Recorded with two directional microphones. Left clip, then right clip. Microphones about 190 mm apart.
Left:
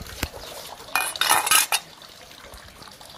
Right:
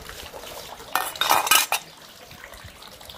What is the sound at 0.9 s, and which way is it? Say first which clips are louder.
Cutlery: even; 20° right (ahead or behind).